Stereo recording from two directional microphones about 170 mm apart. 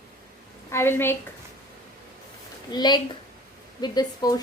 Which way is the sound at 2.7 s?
25° left (ahead or behind).